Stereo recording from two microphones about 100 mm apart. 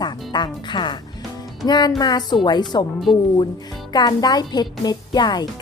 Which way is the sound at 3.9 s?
45° left (ahead or behind).